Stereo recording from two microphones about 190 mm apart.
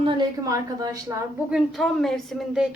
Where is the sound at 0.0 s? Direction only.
25° right (ahead or behind).